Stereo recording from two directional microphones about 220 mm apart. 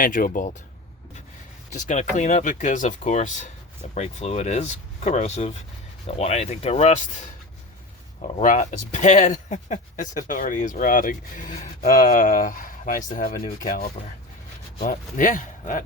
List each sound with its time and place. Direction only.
0.0 s speech: 40° left (ahead or behind)
1.7 s speech: 35° left (ahead or behind)